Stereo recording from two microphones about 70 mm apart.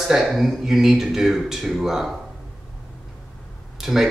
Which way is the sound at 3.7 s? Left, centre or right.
Centre.